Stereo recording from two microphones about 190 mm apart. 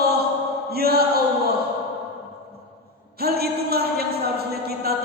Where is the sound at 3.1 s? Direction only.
55° right (ahead or behind).